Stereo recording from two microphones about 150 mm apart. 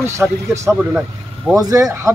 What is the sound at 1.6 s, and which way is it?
Speech, 20° right (ahead or behind).